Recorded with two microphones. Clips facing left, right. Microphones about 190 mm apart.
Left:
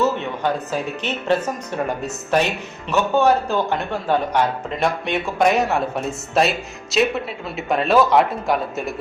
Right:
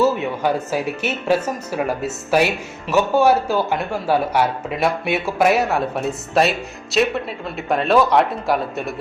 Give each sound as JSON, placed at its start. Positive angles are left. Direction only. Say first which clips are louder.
{"t": 0.0, "sound": "a woman's voice", "louder": "right 3 dB", "side_deg": -10}